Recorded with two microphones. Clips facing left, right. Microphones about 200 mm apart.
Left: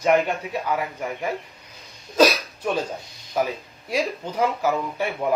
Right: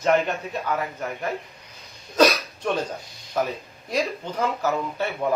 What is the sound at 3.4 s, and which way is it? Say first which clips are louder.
Speech: left 1 dB; 10° left (ahead or behind).